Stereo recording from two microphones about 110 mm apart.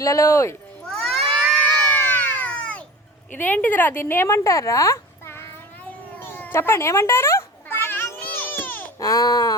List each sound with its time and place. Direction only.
0.0 s speech: 25° left (ahead or behind)
0.9 s a sound: 5° left (ahead or behind)
1.9 s a sound: 20° left (ahead or behind)
3.3 s speech: 15° left (ahead or behind)
6.1 s cat: 20° left (ahead or behind)
9.0 s speech: 35° left (ahead or behind)